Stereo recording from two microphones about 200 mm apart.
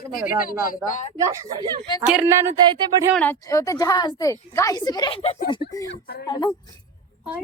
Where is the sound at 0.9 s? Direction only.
40° left (ahead or behind).